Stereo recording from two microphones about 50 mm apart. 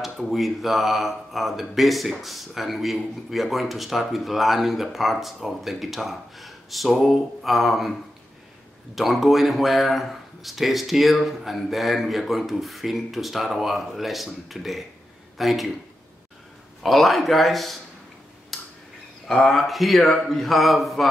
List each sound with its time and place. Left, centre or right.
0.0 s speech: centre
8.9 s a man's voice: centre
16.8 s speech: centre
18.5 s a sound: centre
19.5 s speech: centre